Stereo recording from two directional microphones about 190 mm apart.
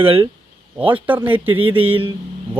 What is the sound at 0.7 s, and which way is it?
Speech, 10° right (ahead or behind).